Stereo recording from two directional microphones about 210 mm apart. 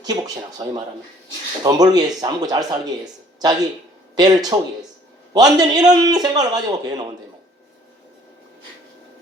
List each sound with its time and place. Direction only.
1.6 s speech: 20° right (ahead or behind)